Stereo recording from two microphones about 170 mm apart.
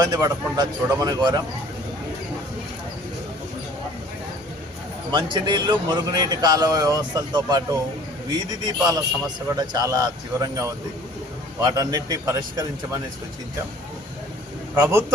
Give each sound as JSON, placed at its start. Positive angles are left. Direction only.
{"t": 0.0, "sound": "a man's voice", "side_deg": -20}
{"t": 5.1, "sound": "a man's voice", "side_deg": -25}
{"t": 14.8, "sound": "speech", "side_deg": -15}